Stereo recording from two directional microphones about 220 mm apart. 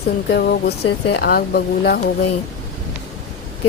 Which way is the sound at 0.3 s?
45° left (ahead or behind).